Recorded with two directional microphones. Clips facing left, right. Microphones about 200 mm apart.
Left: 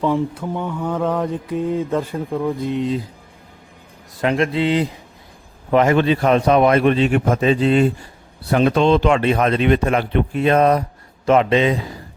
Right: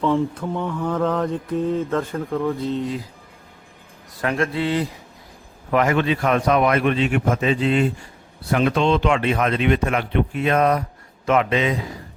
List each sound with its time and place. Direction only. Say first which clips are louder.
0.0 s mantra: left 1 dB; 10° left (ahead or behind)
4.2 s speech: left 4 dB; 20° left (ahead or behind)